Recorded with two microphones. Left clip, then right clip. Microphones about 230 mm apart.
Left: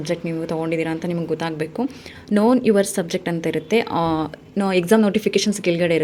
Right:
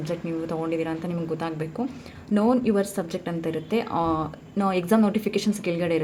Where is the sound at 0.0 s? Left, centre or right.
Left.